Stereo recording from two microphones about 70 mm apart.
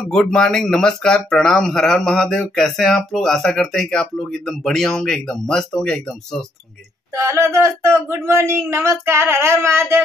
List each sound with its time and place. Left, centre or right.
0.1 s speech: centre
7.2 s speech: right